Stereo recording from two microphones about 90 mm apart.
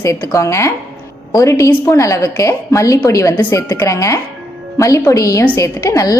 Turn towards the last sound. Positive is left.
turn(degrees=40)  # may be behind; listen again after turning